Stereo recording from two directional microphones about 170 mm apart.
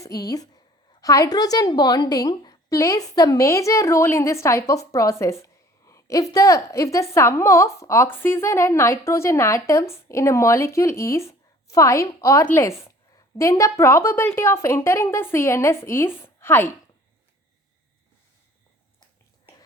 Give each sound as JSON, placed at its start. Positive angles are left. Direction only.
{"t": 0.0, "sound": "a woman's voice", "side_deg": 20}